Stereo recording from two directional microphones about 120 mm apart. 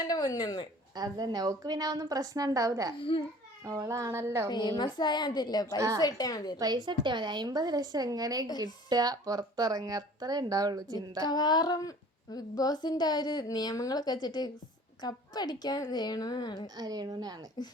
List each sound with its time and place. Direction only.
0.0 s speech: 35° left (ahead or behind)
0.9 s speech: 35° right (ahead or behind)
3.0 s a child's voice: 45° left (ahead or behind)
3.7 s speech: 25° right (ahead or behind)
4.5 s speech: 35° left (ahead or behind)
6.6 s speech: 35° right (ahead or behind)
11.3 s speech: 35° left (ahead or behind)
16.7 s speech: 35° right (ahead or behind)